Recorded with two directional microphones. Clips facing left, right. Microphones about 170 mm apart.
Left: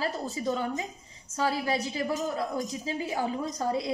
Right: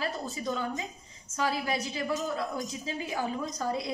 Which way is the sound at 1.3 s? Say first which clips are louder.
Left 2 dB; 35° left (ahead or behind).